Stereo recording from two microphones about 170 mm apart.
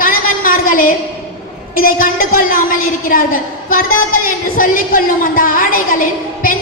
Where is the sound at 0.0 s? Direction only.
55° left (ahead or behind).